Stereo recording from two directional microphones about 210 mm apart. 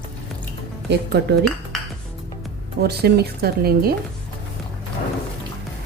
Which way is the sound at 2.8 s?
50° right (ahead or behind).